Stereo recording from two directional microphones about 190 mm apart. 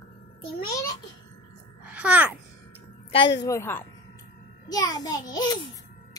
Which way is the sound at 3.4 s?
15° left (ahead or behind).